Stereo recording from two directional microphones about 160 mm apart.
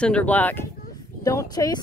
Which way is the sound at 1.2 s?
20° left (ahead or behind).